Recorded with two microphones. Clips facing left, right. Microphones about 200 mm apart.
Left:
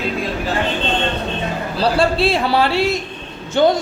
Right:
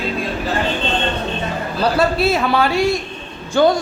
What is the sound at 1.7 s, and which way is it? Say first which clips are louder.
A woman's voice: even; 30° left (ahead or behind).